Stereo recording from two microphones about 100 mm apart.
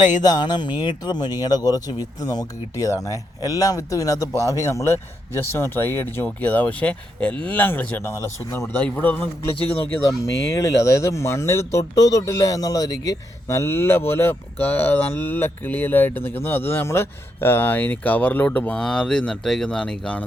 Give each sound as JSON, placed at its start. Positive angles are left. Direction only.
{"t": 0.2, "sound": "speech", "side_deg": 45}
{"t": 10.1, "sound": "speech", "side_deg": 30}